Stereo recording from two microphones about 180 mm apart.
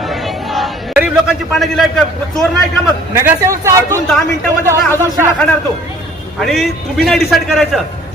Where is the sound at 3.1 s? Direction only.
15° right (ahead or behind).